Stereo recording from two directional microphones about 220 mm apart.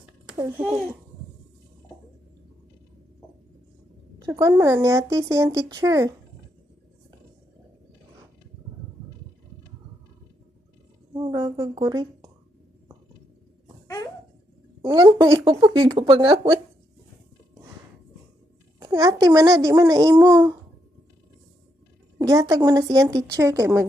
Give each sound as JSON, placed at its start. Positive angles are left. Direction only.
{"t": 0.3, "sound": "a child's voice", "side_deg": -10}
{"t": 4.3, "sound": "speech", "side_deg": -10}
{"t": 11.2, "sound": "a sound", "side_deg": -20}
{"t": 13.8, "sound": "a sound", "side_deg": 15}
{"t": 14.8, "sound": "speech", "side_deg": -20}
{"t": 18.9, "sound": "speech", "side_deg": -15}
{"t": 22.2, "sound": "speech", "side_deg": -15}